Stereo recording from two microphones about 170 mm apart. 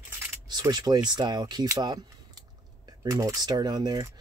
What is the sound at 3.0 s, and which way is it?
Speech, 20° right (ahead or behind).